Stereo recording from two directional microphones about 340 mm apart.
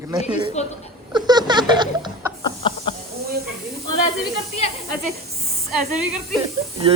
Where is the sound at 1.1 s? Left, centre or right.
Centre.